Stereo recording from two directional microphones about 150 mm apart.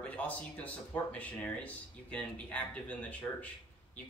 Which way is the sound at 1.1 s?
10° left (ahead or behind).